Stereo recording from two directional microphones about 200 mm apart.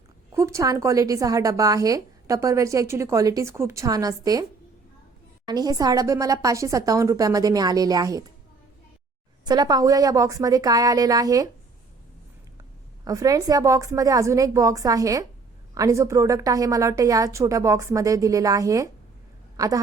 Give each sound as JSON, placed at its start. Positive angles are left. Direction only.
{"t": 0.3, "sound": "a woman's voice", "side_deg": -15}
{"t": 5.5, "sound": "a woman's voice", "side_deg": -20}
{"t": 9.4, "sound": "a woman's voice", "side_deg": -20}
{"t": 13.1, "sound": "a woman's voice", "side_deg": -20}